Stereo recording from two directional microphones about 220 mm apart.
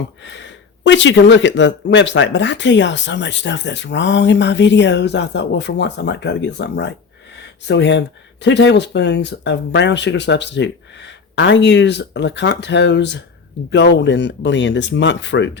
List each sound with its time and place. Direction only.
0.2 s speech: 55° left (ahead or behind)